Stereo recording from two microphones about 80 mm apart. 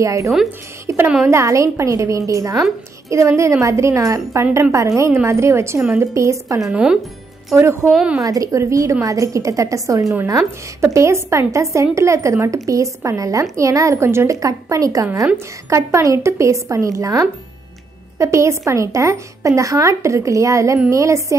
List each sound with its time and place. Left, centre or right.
0.0 s a woman's voice: right
0.9 s music: right
1.3 s a woman's voice: right
6.7 s speech: centre
7.8 s speech: centre
8.2 s a woman's voice: right